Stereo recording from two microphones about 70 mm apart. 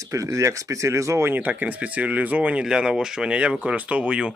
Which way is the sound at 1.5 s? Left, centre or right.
Right.